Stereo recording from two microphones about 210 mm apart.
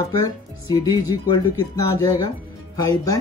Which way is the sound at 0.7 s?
15° left (ahead or behind).